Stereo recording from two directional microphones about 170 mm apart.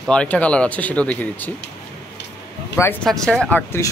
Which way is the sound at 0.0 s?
5° left (ahead or behind).